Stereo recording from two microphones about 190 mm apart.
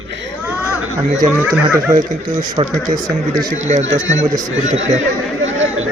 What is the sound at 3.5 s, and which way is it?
Speech, 40° right (ahead or behind).